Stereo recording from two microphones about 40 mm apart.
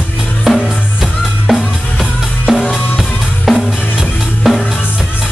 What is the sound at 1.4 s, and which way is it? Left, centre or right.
Drum kit, centre.